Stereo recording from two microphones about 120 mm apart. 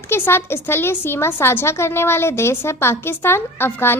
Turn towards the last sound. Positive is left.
turn(degrees=20)  # may be behind; listen again after turning